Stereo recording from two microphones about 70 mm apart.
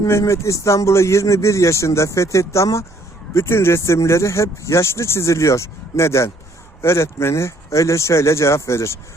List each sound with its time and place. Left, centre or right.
0.1 s speech: left